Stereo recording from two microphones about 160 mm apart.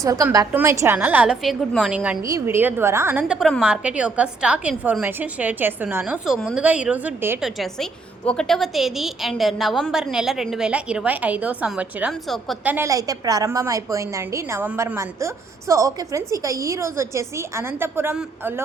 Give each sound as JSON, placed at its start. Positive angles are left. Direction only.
{"t": 0.0, "sound": "a woman's voice", "side_deg": -20}
{"t": 2.2, "sound": "a woman's voice", "side_deg": -20}
{"t": 7.4, "sound": "a woman's voice", "side_deg": 0}
{"t": 12.7, "sound": "a woman's voice", "side_deg": -20}